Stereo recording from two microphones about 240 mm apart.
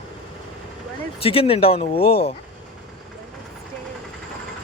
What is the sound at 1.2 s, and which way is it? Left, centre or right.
Speech, left.